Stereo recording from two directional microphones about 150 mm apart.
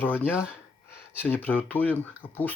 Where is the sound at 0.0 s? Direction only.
15° left (ahead or behind).